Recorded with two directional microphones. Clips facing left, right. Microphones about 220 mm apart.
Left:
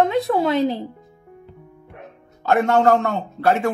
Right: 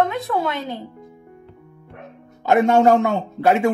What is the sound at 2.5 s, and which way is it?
Speech, 15° right (ahead or behind).